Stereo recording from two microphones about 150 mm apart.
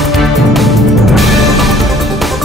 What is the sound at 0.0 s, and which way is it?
Music, centre (ahead or behind).